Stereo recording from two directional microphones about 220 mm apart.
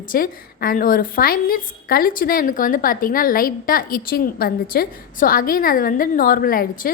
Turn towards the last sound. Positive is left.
turn(degrees=40)  # may be behind; listen again after turning